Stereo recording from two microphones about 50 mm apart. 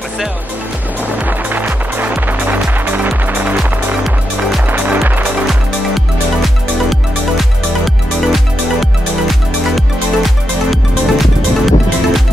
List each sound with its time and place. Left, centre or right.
1.5 s music: right
3.5 s music: centre
4.6 s music: right
6.4 s music: centre